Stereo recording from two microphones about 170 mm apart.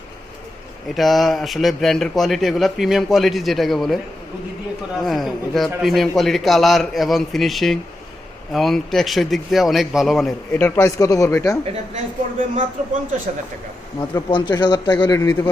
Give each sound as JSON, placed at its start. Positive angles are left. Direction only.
{"t": 0.9, "sound": "a man's voice", "side_deg": 0}
{"t": 5.0, "sound": "a man's voice", "side_deg": 0}
{"t": 10.5, "sound": "speech", "side_deg": 15}
{"t": 11.6, "sound": "a woman's voice", "side_deg": -45}
{"t": 14.2, "sound": "a man's voice", "side_deg": 25}